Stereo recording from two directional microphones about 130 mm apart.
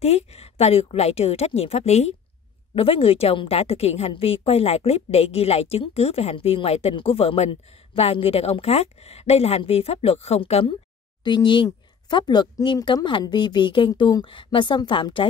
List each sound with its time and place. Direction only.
0.0 s a woman's voice: 55° left (ahead or behind)